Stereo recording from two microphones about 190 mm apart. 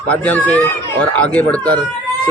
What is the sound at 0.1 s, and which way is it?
Speech, 5° left (ahead or behind).